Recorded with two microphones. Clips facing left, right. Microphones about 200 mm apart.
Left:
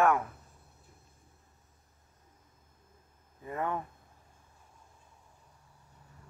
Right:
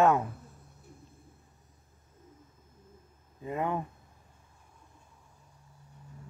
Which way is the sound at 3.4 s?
20° right (ahead or behind).